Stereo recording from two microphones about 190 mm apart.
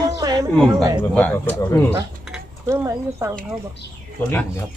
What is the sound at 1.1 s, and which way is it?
Speech, 10° left (ahead or behind).